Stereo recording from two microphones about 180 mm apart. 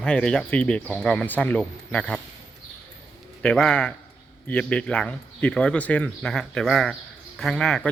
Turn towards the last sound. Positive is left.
turn(degrees=5)  # may be behind; listen again after turning